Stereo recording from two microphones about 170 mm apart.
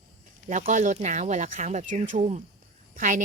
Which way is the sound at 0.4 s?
45° right (ahead or behind).